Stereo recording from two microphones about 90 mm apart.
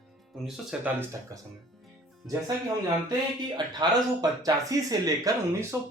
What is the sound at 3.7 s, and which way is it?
Speech, 45° right (ahead or behind).